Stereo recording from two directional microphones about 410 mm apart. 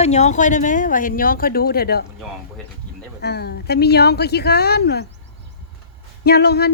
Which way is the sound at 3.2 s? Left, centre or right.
Left.